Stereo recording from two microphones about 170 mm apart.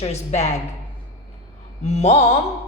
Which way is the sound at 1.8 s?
40° left (ahead or behind).